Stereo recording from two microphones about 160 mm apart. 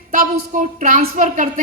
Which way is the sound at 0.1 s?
55° right (ahead or behind).